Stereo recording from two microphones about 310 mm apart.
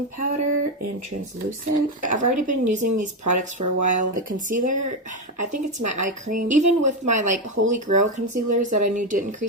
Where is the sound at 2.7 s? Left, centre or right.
Right.